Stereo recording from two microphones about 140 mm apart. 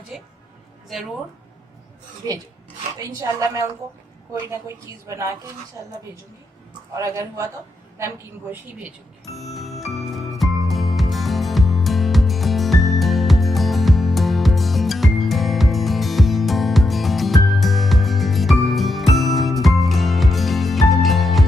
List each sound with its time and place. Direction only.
2.2 s a woman's voice: 30° right (ahead or behind)
6.9 s a woman's voice: 20° right (ahead or behind)
9.3 s music: centre (ahead or behind)